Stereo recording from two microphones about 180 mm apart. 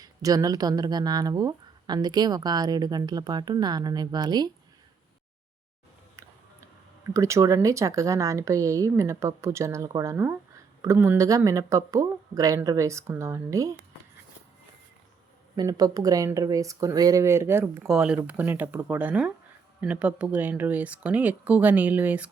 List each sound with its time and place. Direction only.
0.0 s speech: 20° right (ahead or behind)
7.1 s speech: 15° right (ahead or behind)
15.5 s speech: 20° right (ahead or behind)